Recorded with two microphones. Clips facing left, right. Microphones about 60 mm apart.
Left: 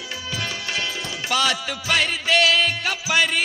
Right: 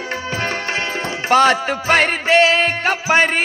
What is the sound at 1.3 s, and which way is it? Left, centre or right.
Music, right.